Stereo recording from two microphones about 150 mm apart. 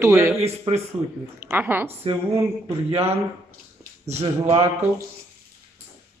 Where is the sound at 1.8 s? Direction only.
40° right (ahead or behind).